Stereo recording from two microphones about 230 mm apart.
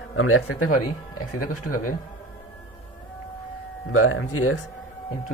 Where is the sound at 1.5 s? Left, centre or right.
Left.